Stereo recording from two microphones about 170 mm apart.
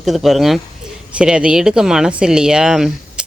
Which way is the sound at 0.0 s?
Centre (ahead or behind).